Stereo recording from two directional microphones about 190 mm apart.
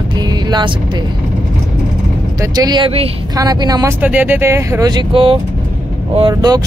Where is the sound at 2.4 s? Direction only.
20° right (ahead or behind).